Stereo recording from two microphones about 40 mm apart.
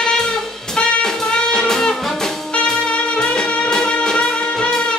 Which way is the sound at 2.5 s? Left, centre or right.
Left.